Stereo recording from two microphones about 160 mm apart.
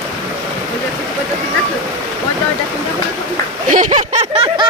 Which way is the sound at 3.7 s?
50° right (ahead or behind).